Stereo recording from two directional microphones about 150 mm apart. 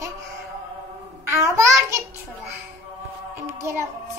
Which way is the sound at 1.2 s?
20° right (ahead or behind).